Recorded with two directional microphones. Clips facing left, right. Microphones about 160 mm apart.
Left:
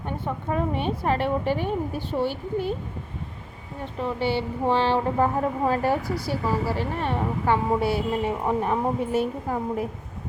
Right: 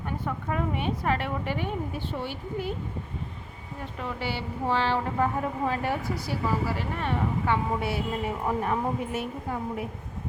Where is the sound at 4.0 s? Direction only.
25° left (ahead or behind).